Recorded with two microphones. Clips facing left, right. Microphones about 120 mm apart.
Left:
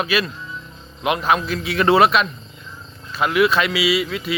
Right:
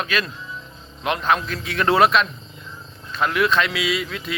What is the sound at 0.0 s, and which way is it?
Speech, 10° left (ahead or behind).